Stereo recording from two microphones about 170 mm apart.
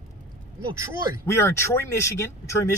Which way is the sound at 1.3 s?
15° left (ahead or behind).